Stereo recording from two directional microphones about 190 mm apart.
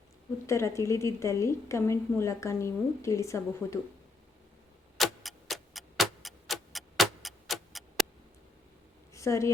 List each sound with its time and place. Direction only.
0.4 s a woman's voice: 15° left (ahead or behind)
4.9 s clock: centre (ahead or behind)
9.1 s a woman's voice: 15° left (ahead or behind)